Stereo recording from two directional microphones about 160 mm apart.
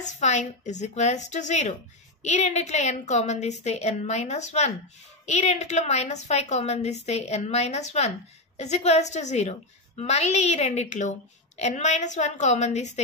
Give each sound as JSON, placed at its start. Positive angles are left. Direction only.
{"t": 0.0, "sound": "a woman's voice", "side_deg": 45}